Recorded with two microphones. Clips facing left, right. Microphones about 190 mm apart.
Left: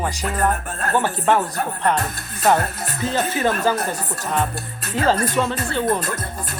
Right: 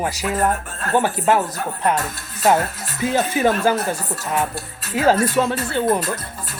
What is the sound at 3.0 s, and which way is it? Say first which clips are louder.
Speech: right 3 dB; 10° right (ahead or behind).